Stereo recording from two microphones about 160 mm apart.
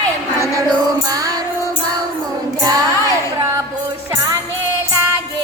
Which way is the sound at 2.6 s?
25° right (ahead or behind).